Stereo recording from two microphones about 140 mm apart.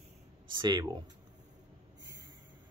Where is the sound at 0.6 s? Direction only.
30° right (ahead or behind).